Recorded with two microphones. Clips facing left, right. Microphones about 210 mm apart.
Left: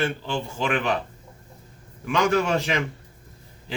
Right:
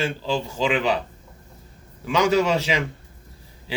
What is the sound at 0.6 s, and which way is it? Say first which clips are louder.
Speech: right 2 dB; 10° right (ahead or behind).